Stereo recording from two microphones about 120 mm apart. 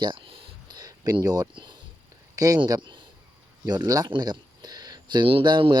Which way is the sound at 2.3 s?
30° right (ahead or behind).